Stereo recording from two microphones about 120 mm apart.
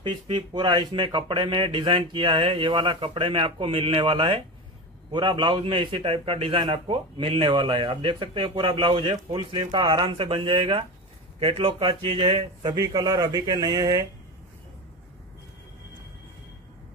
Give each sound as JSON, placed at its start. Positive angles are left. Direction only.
{"t": 0.0, "sound": "a man's voice", "side_deg": -40}
{"t": 12.7, "sound": "speech", "side_deg": -25}